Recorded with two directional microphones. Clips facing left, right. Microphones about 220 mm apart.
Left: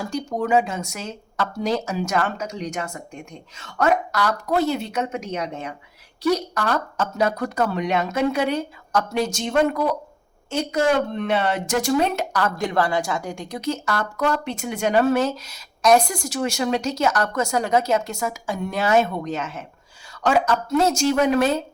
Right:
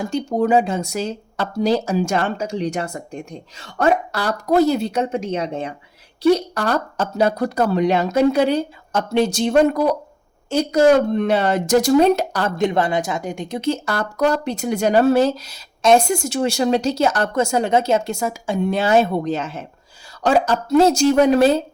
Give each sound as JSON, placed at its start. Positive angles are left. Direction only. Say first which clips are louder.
{"t": 0.0, "sound": "speech", "louder": "right 5 dB", "side_deg": -25}